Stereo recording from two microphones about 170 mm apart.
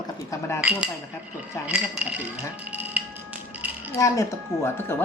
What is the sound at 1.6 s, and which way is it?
Music, 10° right (ahead or behind).